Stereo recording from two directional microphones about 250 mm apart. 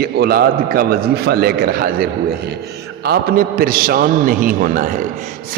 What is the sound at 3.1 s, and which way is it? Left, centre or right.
A man's voice, right.